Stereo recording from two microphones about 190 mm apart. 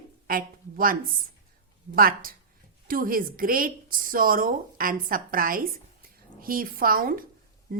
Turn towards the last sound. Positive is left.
turn(degrees=-50)  # may be behind; listen again after turning